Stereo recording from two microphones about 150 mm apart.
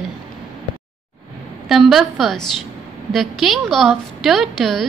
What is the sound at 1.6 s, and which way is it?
A woman's voice, centre (ahead or behind).